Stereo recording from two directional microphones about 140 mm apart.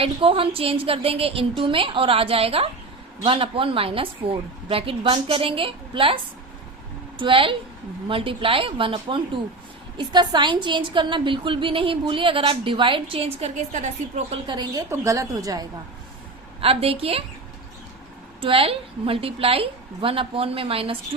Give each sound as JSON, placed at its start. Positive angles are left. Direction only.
{"t": 0.0, "sound": "a woman's voice", "side_deg": -40}
{"t": 7.2, "sound": "a woman's voice", "side_deg": -40}
{"t": 14.4, "sound": "a woman's voice", "side_deg": -30}
{"t": 16.6, "sound": "a woman's voice", "side_deg": -45}
{"t": 18.3, "sound": "a woman's voice", "side_deg": -40}